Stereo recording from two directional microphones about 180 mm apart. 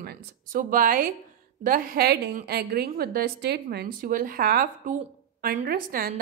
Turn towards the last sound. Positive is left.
turn(degrees=-55)  # may be behind; listen again after turning